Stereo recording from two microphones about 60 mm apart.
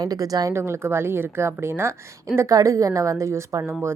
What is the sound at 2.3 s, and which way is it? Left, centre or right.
A woman's voice, right.